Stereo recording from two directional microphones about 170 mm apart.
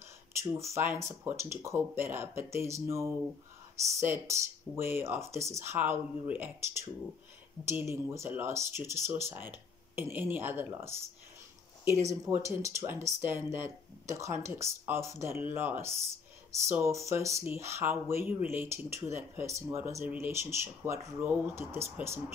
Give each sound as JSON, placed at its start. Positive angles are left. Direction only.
{"t": 0.4, "sound": "speech", "side_deg": -15}
{"t": 12.1, "sound": "speech", "side_deg": -15}